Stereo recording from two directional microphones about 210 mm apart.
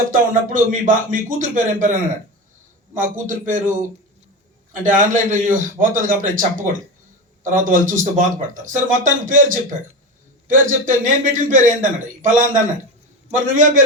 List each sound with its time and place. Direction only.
0.1 s speech: 40° right (ahead or behind)
4.8 s speech: 40° right (ahead or behind)